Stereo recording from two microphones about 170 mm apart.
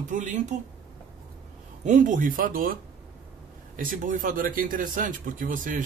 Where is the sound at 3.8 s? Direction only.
50° right (ahead or behind).